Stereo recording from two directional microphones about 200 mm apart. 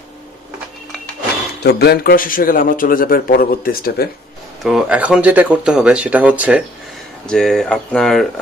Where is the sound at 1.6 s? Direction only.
55° left (ahead or behind).